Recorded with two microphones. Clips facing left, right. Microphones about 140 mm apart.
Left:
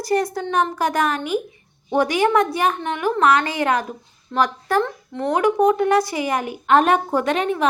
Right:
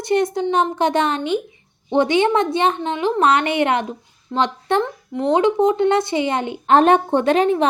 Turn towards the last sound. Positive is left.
turn(degrees=-30)  # may be behind; listen again after turning